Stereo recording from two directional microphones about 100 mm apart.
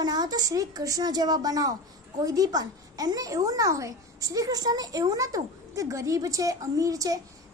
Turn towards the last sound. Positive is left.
turn(degrees=-35)  # may be behind; listen again after turning